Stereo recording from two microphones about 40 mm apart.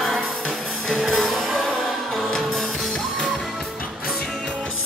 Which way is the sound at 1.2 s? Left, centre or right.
Centre.